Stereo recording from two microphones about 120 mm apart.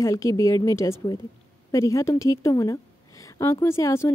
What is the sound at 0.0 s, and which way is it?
A woman's voice, 25° left (ahead or behind).